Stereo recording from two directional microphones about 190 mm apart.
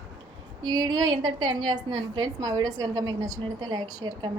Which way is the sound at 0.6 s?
90° right.